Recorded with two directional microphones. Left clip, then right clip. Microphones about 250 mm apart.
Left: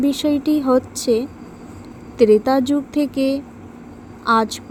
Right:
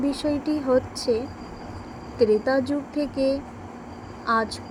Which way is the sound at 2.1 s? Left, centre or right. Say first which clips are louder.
Left 7 dB; left.